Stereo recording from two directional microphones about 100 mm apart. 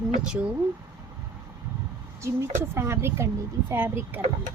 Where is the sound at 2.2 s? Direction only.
30° right (ahead or behind).